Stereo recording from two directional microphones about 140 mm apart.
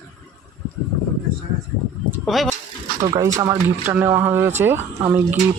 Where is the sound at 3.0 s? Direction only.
25° right (ahead or behind).